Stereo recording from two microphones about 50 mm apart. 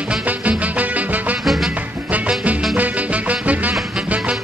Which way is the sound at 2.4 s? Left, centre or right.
Right.